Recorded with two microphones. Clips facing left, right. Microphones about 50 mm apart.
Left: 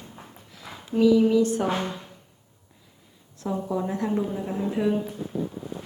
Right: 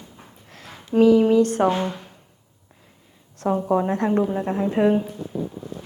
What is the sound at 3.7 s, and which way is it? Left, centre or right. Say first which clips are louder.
Speech: right 6 dB; right.